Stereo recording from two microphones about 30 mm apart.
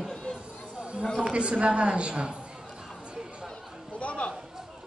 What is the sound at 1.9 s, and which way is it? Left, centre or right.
Speech, right.